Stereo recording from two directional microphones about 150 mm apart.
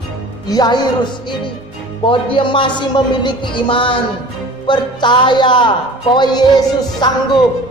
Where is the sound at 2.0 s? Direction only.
35° left (ahead or behind).